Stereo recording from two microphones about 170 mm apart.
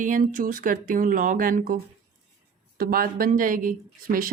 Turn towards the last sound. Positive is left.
turn(degrees=-55)  # may be behind; listen again after turning